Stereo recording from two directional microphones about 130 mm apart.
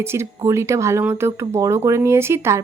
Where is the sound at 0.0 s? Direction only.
20° right (ahead or behind).